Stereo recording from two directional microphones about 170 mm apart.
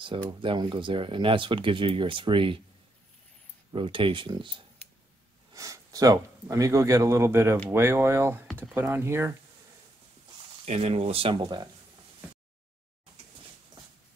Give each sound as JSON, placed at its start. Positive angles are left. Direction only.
{"t": 0.3, "sound": "speech", "side_deg": -30}
{"t": 3.7, "sound": "speech", "side_deg": -30}
{"t": 10.6, "sound": "speech", "side_deg": -40}